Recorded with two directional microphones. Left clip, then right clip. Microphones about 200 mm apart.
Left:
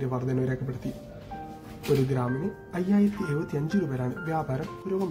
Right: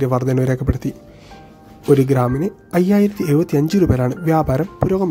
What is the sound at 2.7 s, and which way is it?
Speech, 60° right (ahead or behind).